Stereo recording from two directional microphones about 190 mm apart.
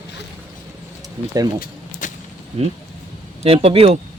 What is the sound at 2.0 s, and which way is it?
Whip, 45° left (ahead or behind).